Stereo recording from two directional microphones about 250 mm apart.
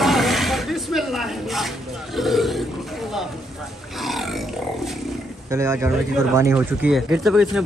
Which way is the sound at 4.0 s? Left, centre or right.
Centre.